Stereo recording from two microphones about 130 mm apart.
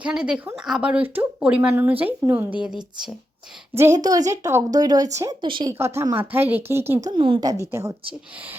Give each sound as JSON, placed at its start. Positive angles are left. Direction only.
{"t": 0.0, "sound": "speech", "side_deg": -5}
{"t": 3.8, "sound": "a woman's voice", "side_deg": -20}
{"t": 5.4, "sound": "speech", "side_deg": -40}
{"t": 5.7, "sound": "a woman's voice", "side_deg": -20}
{"t": 7.1, "sound": "speech", "side_deg": -40}
{"t": 7.4, "sound": "a woman's voice", "side_deg": -25}